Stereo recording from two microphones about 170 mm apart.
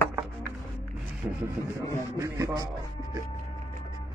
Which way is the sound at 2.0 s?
15° right (ahead or behind).